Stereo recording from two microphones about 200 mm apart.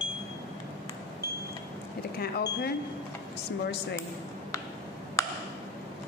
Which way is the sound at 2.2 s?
50° left (ahead or behind).